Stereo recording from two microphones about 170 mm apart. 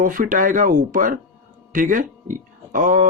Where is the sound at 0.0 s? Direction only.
50° right (ahead or behind).